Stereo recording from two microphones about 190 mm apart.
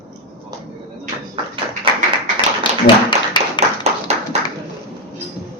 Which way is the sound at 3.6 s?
25° left (ahead or behind).